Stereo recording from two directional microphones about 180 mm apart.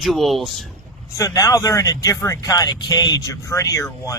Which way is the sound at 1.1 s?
20° left (ahead or behind).